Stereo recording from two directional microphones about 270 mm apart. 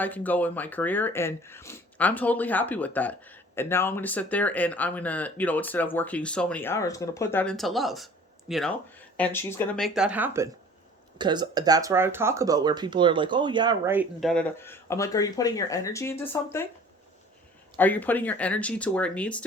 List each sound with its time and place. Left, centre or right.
0.0 s speech: centre
17.7 s speech: centre